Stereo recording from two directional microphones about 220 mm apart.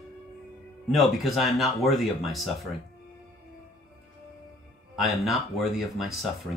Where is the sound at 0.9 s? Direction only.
Centre (ahead or behind).